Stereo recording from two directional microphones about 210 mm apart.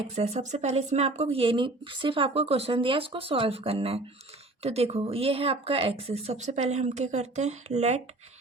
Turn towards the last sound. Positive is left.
turn(degrees=-30)  # may be behind; listen again after turning